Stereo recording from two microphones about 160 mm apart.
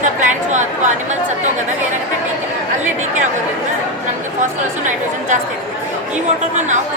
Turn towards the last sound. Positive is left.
turn(degrees=-50)  # may be behind; listen again after turning